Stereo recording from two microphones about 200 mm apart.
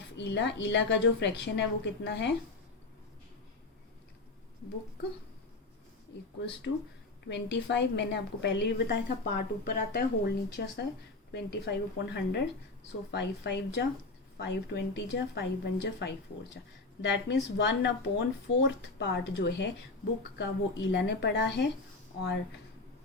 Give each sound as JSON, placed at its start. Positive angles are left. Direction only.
{"t": 0.2, "sound": "speech", "side_deg": 60}
{"t": 7.3, "sound": "speech", "side_deg": 60}
{"t": 9.0, "sound": "speech", "side_deg": 45}